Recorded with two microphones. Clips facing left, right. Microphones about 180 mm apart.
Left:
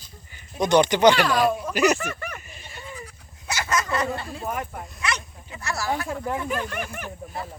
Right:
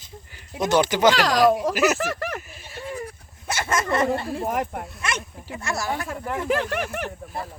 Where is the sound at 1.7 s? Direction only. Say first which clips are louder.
Left 1 dB; 5° right (ahead or behind).